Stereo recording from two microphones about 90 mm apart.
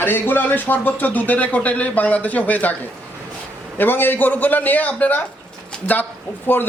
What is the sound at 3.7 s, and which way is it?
Speech, 20° left (ahead or behind).